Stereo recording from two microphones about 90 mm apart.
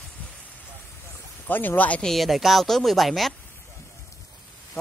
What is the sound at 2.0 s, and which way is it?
Speech, centre (ahead or behind).